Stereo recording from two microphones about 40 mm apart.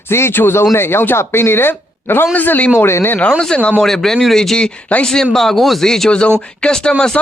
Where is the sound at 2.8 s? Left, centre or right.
Left.